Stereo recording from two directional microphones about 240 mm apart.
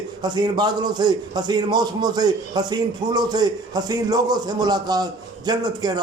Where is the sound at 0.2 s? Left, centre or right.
Centre.